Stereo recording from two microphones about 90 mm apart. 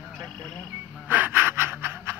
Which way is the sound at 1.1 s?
25° right (ahead or behind).